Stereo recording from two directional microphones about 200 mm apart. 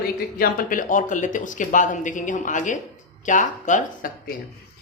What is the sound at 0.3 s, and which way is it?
Speech, 45° left (ahead or behind).